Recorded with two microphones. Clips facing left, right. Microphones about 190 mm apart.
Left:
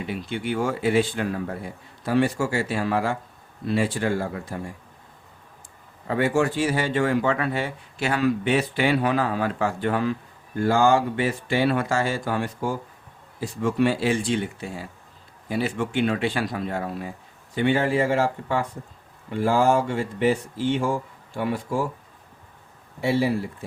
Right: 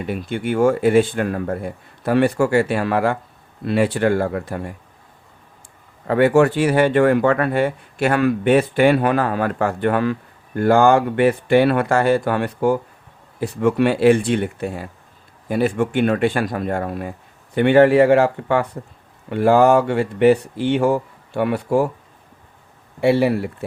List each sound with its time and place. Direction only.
0.0 s speech: 50° right (ahead or behind)
6.1 s speech: 65° right (ahead or behind)
23.0 s speech: 65° right (ahead or behind)